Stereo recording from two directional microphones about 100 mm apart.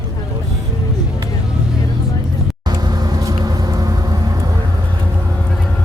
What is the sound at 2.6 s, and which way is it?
Vehicle, 45° right (ahead or behind).